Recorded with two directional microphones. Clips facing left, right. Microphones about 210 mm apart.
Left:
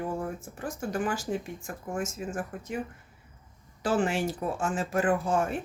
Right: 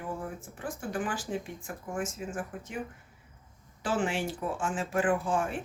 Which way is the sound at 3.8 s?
40° left (ahead or behind).